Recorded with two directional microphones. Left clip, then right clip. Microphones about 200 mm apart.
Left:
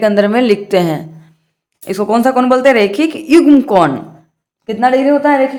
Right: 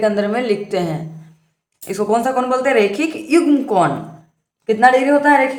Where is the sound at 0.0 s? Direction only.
40° left (ahead or behind).